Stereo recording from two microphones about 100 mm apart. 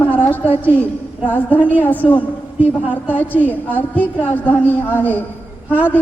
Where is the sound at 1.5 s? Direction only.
15° right (ahead or behind).